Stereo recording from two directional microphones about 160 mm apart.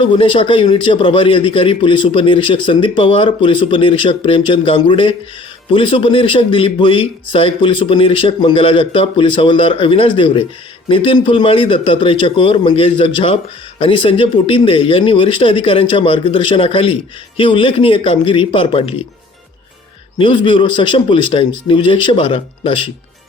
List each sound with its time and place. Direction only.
0.0 s a man's voice: 35° left (ahead or behind)
20.1 s a man's voice: 30° left (ahead or behind)